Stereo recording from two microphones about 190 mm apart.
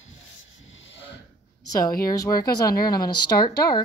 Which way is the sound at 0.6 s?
80° left.